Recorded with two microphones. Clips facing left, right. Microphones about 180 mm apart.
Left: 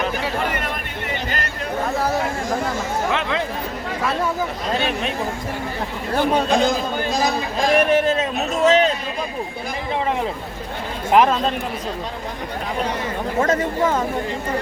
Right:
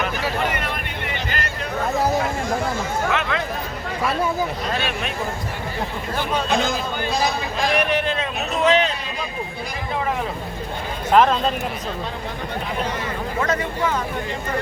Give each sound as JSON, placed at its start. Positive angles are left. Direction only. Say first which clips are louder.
{"t": 3.1, "sound": "speech", "louder": "left 1 dB", "side_deg": 30}
{"t": 4.7, "sound": "speech", "louder": "left 3 dB", "side_deg": 30}
{"t": 6.1, "sound": "speech", "louder": "left 5 dB", "side_deg": 35}
{"t": 7.7, "sound": "speech", "louder": "left 6 dB", "side_deg": 45}
{"t": 11.1, "sound": "speech", "louder": "even", "side_deg": 5}
{"t": 13.4, "sound": "speech", "louder": "left 4 dB", "side_deg": 45}